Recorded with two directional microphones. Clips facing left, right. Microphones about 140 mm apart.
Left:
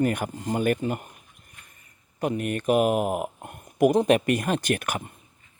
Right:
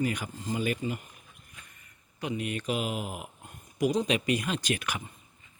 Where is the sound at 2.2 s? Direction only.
50° left (ahead or behind).